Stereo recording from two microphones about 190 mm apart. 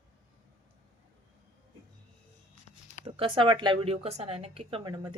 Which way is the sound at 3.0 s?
30° right (ahead or behind).